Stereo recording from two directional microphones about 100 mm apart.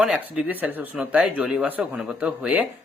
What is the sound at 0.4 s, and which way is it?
Speech, 15° right (ahead or behind).